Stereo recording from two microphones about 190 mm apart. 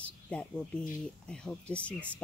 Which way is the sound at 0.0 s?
5° left (ahead or behind).